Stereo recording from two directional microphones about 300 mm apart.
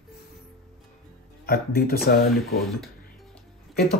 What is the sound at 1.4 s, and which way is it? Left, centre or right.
Speech, left.